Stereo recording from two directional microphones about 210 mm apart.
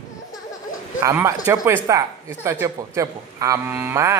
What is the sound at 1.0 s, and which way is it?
Speech, 15° right (ahead or behind).